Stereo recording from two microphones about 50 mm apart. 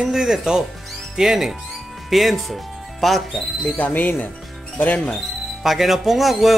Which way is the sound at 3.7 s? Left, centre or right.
Left.